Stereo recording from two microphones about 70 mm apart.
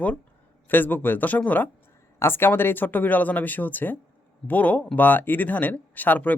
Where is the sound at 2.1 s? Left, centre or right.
Left.